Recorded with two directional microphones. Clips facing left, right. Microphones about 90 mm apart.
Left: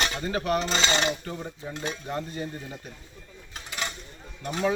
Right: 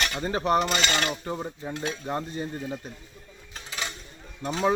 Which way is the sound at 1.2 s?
25° right (ahead or behind).